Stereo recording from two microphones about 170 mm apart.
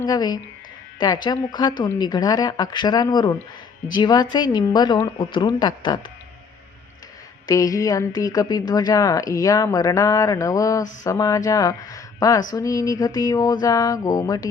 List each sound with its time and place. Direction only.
0.0 s a woman's voice: 25° left (ahead or behind)
7.4 s a woman's voice: 20° left (ahead or behind)